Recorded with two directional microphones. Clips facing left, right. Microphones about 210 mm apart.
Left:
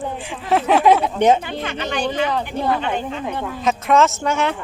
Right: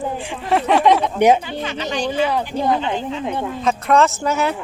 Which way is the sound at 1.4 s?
55° left (ahead or behind).